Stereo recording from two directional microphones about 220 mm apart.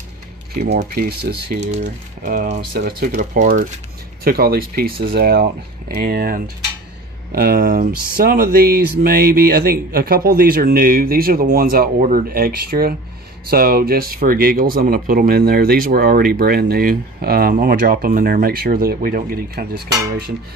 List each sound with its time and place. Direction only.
0.6 s speech: 45° right (ahead or behind)
1.6 s speech: 35° right (ahead or behind)